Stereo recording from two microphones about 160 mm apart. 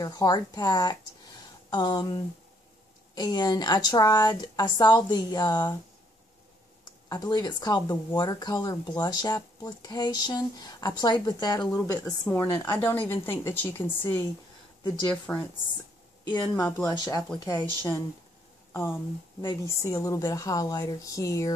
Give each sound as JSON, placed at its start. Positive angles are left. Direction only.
{"t": 0.0, "sound": "speech", "side_deg": 25}
{"t": 3.2, "sound": "speech", "side_deg": 25}
{"t": 7.1, "sound": "a woman's voice", "side_deg": 25}
{"t": 15.3, "sound": "a woman's voice", "side_deg": 5}
{"t": 16.3, "sound": "speech", "side_deg": 25}